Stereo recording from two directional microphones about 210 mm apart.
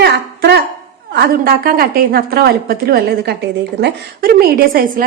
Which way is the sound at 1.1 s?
45° right (ahead or behind).